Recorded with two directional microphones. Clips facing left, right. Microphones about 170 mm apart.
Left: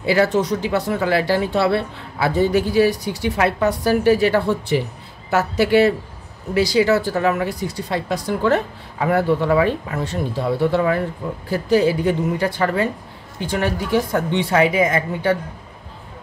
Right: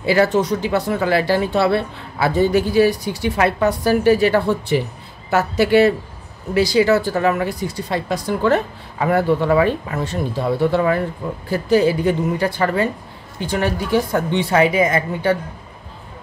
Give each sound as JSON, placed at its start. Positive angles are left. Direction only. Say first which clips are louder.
{"t": 0.0, "sound": "a woman's voice", "louder": "right 1 dB", "side_deg": -45}